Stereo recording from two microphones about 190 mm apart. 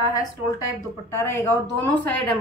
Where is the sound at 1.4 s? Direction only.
10° left (ahead or behind).